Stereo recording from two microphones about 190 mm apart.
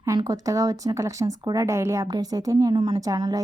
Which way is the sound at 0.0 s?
20° right (ahead or behind).